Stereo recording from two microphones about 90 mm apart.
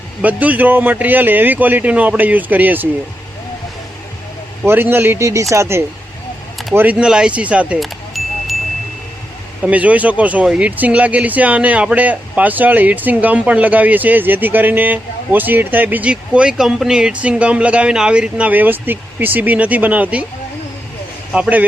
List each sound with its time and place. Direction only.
0.2 s speech: 15° right (ahead or behind)
4.6 s speech: 25° right (ahead or behind)
6.7 s speech: 15° right (ahead or behind)
7.8 s chime: centre (ahead or behind)
9.6 s speech: 15° right (ahead or behind)
21.3 s speech: 10° right (ahead or behind)